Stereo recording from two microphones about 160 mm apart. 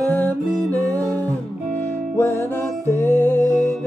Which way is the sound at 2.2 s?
15° left (ahead or behind).